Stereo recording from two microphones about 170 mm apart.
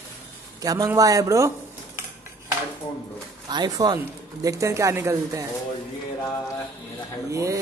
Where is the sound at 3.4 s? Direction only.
25° right (ahead or behind).